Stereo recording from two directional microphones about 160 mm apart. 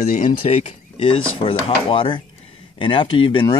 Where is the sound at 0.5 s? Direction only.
40° left (ahead or behind).